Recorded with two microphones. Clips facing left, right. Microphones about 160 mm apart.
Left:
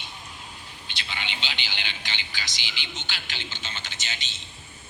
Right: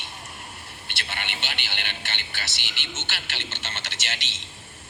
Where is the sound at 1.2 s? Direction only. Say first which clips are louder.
Left 1 dB; 65° right (ahead or behind).